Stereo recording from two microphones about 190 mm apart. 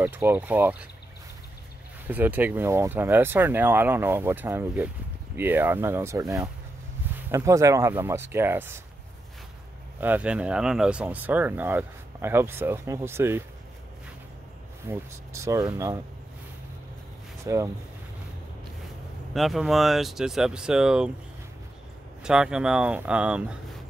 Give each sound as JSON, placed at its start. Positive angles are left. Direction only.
{"t": 0.0, "sound": "speech", "side_deg": -10}
{"t": 2.0, "sound": "speech", "side_deg": -10}
{"t": 9.9, "sound": "speech", "side_deg": -10}
{"t": 14.9, "sound": "speech", "side_deg": -15}
{"t": 17.4, "sound": "speech", "side_deg": -15}
{"t": 19.3, "sound": "speech", "side_deg": 0}
{"t": 22.2, "sound": "speech", "side_deg": -5}